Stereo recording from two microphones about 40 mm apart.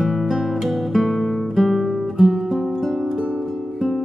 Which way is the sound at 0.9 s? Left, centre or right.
Centre.